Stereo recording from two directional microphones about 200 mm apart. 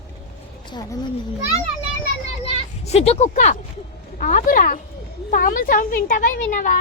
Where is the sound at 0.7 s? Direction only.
20° left (ahead or behind).